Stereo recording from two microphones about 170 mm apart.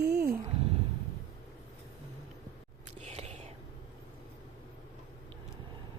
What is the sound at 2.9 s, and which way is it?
Whispering, 40° right (ahead or behind).